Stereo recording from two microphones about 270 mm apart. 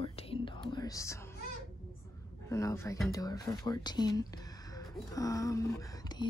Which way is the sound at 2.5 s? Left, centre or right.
Centre.